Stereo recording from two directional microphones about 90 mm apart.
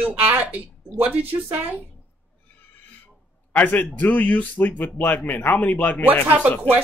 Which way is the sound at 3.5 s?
20° left (ahead or behind).